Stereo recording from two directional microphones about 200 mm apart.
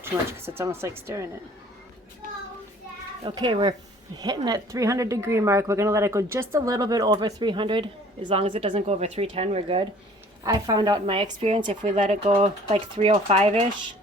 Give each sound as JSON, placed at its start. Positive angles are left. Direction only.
{"t": 0.0, "sound": "a woman's voice", "side_deg": -10}
{"t": 3.2, "sound": "a woman's voice", "side_deg": -25}